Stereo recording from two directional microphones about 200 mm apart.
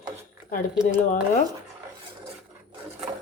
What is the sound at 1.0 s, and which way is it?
Speech, 40° left (ahead or behind).